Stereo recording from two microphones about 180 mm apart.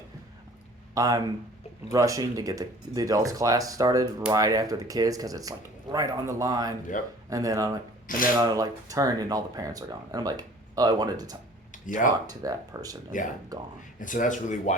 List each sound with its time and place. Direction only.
0.9 s speech: 20° right (ahead or behind)
6.9 s speech: 45° left (ahead or behind)
7.3 s speech: 20° right (ahead or behind)
11.7 s a sound: 45° left (ahead or behind)
12.3 s speech: 20° right (ahead or behind)
14.0 s speech: 45° left (ahead or behind)